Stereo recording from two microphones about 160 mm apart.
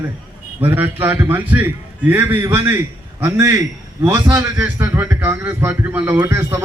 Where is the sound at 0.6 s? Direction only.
10° right (ahead or behind).